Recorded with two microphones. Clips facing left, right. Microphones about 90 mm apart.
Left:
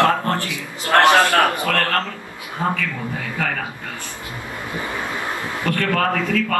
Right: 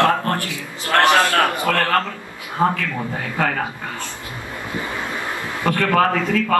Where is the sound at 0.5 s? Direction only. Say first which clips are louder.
Left 2 dB; 20° left (ahead or behind).